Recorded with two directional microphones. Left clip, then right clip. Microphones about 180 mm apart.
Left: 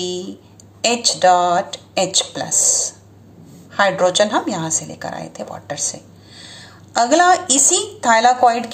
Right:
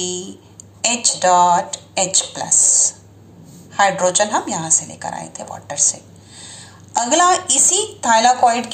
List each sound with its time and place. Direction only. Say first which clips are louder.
0.8 s a woman's voice: left 2 dB; 30° left (ahead or behind)